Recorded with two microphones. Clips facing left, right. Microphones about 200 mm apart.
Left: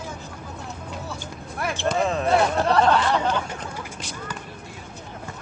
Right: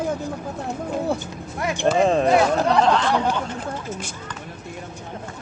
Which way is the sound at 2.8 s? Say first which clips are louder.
Right 1 dB; centre (ahead or behind).